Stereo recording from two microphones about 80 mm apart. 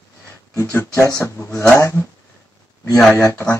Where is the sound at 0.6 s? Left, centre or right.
Left.